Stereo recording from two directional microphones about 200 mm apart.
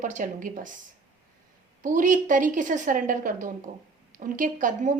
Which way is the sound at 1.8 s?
40° right (ahead or behind).